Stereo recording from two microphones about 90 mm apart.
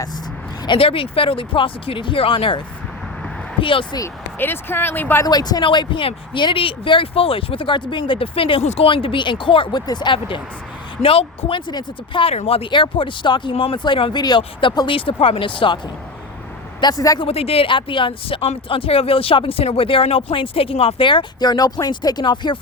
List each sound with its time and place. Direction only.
0.6 s speech: 75° left (ahead or behind)
3.6 s speech: 75° left (ahead or behind)
4.4 s speech: 25° left (ahead or behind)
5.2 s speech: 50° left (ahead or behind)
5.6 s speech: 60° left (ahead or behind)
9.8 s speech: 55° left (ahead or behind)
11.0 s speech: 90° left
11.7 s speech: 55° left (ahead or behind)
12.2 s speech: 90° left; by 15.8 s 70° left (ahead or behind)
16.8 s a woman's voice: 40° left (ahead or behind)
17.2 s speech: 90° left; by 21.2 s 70° left (ahead or behind)
21.4 s speech: 45° left (ahead or behind)